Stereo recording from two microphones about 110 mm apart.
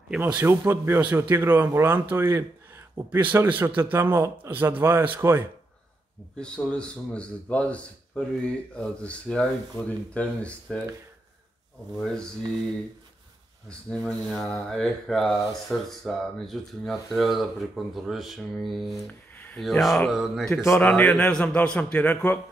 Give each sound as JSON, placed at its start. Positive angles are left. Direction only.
{"t": 0.2, "sound": "a man's voice", "side_deg": -15}
{"t": 6.3, "sound": "speech", "side_deg": 10}
{"t": 12.0, "sound": "speech", "side_deg": 5}
{"t": 13.7, "sound": "speech", "side_deg": 5}
{"t": 20.5, "sound": "a man's voice", "side_deg": 25}
{"t": 20.8, "sound": "speech", "side_deg": 10}